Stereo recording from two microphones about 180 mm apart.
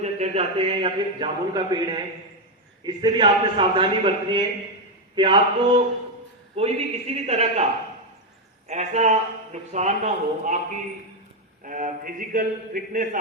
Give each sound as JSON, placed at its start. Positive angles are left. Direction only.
{"t": 0.0, "sound": "a man's voice", "side_deg": -40}
{"t": 11.6, "sound": "a man's voice", "side_deg": -45}